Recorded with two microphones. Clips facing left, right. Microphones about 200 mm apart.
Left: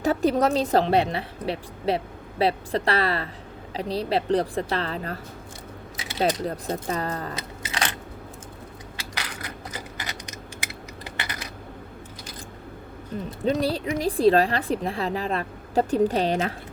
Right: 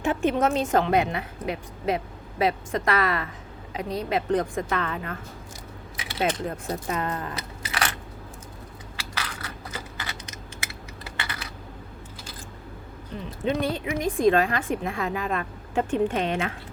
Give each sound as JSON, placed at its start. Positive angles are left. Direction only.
{"t": 0.0, "sound": "speech", "side_deg": 40}
{"t": 6.4, "sound": "speech", "side_deg": 35}
{"t": 7.3, "sound": "a sound", "side_deg": 25}
{"t": 9.0, "sound": "a sound", "side_deg": 15}
{"t": 11.0, "sound": "typing", "side_deg": 15}
{"t": 13.1, "sound": "speech", "side_deg": 40}